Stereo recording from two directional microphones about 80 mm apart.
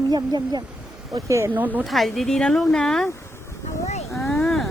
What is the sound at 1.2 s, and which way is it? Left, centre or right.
Speech, right.